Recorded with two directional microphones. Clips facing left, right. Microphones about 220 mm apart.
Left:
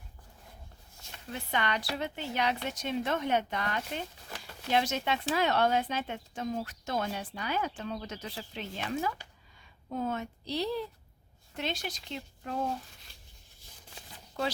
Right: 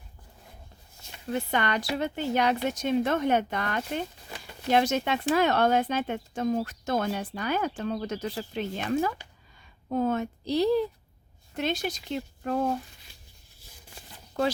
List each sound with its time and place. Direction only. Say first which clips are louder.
1.3 s speech: right 6 dB; 50° right (ahead or behind)